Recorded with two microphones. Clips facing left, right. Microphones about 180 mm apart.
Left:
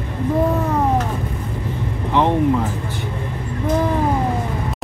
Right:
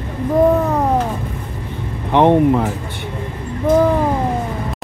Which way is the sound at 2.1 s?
60° right (ahead or behind).